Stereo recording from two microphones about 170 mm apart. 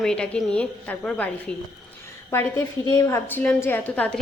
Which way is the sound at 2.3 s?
15° left (ahead or behind).